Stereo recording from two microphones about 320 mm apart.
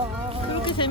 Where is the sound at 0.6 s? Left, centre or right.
Centre.